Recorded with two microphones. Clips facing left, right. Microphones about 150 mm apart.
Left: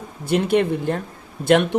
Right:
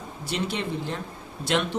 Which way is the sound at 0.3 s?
55° left (ahead or behind).